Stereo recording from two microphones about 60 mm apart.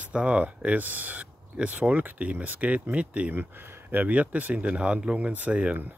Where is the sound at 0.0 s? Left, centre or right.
Centre.